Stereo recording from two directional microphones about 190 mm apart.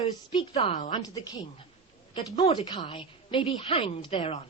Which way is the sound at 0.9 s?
20° left (ahead or behind).